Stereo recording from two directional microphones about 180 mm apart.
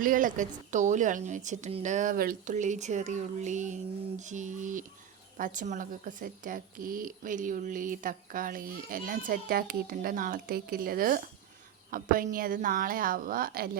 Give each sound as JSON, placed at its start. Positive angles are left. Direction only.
{"t": 0.0, "sound": "a woman's voice", "side_deg": -50}